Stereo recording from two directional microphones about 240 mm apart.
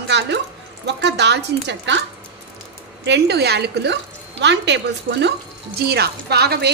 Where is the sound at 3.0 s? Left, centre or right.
Right.